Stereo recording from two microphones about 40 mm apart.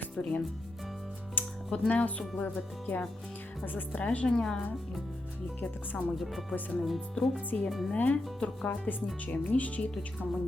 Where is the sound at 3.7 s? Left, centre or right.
Left.